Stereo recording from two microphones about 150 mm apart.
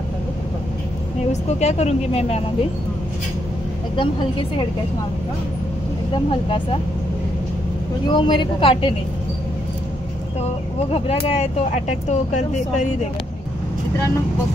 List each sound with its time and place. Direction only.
1.3 s speech: 50° left (ahead or behind)
3.9 s a woman's voice: 35° left (ahead or behind)
8.1 s a woman's voice: 30° left (ahead or behind)
10.9 s speech: 45° left (ahead or behind)